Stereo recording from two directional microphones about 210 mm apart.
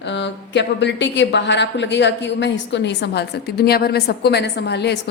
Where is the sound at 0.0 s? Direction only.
60° left (ahead or behind).